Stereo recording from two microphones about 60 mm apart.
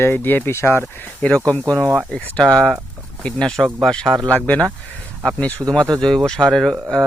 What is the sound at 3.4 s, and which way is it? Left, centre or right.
Speech, centre.